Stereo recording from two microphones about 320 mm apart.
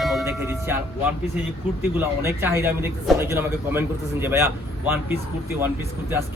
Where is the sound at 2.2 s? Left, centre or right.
Centre.